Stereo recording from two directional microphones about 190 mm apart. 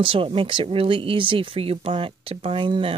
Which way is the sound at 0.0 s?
30° right (ahead or behind).